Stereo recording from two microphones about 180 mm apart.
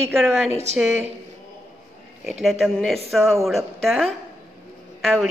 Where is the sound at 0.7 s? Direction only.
40° right (ahead or behind).